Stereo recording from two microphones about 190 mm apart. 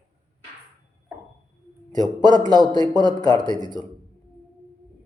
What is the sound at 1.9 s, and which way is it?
Speech, 20° right (ahead or behind).